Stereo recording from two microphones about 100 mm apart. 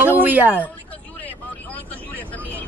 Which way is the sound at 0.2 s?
20° right (ahead or behind).